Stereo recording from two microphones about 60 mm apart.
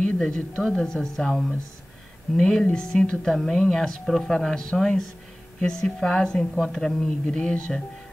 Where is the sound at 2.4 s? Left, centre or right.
Centre.